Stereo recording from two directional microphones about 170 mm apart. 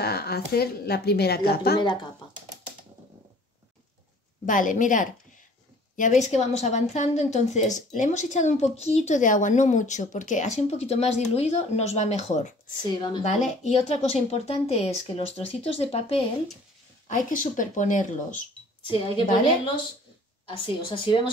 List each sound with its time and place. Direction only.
0.0 s a woman's voice: 70° left (ahead or behind)
4.5 s a woman's voice: 50° left (ahead or behind)
12.8 s a woman's voice: 25° left (ahead or behind)
13.3 s speech: 40° left (ahead or behind)
17.1 s a woman's voice: 50° left (ahead or behind)
18.9 s speech: 30° left (ahead or behind)
20.4 s a woman's voice: 30° left (ahead or behind)